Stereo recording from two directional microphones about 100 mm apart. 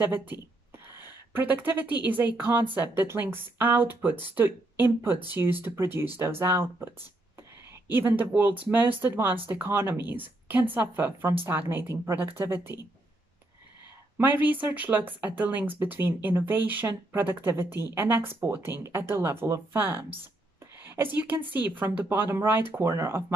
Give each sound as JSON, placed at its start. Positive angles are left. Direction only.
{"t": 0.0, "sound": "a woman's voice", "side_deg": -20}
{"t": 7.9, "sound": "speech", "side_deg": -20}
{"t": 14.1, "sound": "speech", "side_deg": -20}